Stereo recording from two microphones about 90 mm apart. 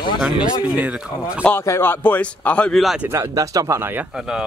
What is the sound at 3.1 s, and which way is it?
Speech, 40° right (ahead or behind).